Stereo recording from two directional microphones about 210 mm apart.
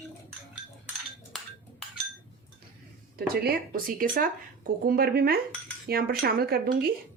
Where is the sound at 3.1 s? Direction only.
45° right (ahead or behind).